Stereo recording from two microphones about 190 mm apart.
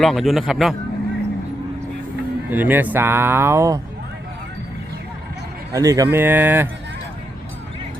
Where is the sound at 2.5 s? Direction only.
10° right (ahead or behind).